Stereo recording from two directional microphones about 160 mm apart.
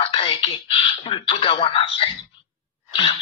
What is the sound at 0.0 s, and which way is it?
Speech, 35° left (ahead or behind).